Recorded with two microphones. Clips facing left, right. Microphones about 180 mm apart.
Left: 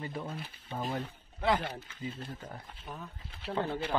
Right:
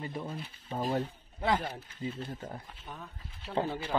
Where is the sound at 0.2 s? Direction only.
5° right (ahead or behind).